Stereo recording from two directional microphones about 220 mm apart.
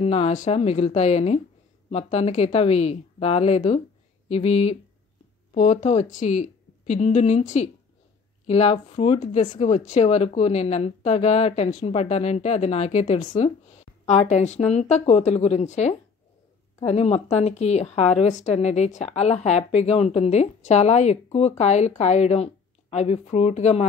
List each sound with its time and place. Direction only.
0.0 s a woman's voice: 25° left (ahead or behind)